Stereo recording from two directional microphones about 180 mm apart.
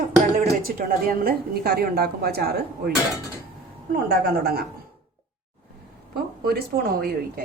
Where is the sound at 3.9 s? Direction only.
55° right (ahead or behind).